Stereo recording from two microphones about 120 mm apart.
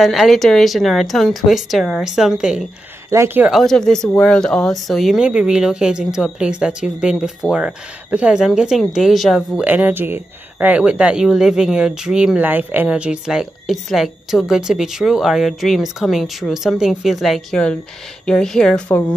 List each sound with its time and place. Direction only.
0.0 s speech: centre (ahead or behind)
3.1 s speech: 25° right (ahead or behind)
3.4 s speech: centre (ahead or behind)
9.7 s speech: 15° right (ahead or behind); by 18.8 s 5° left (ahead or behind)